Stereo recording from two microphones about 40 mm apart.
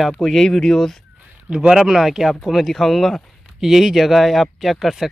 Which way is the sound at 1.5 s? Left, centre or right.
Centre.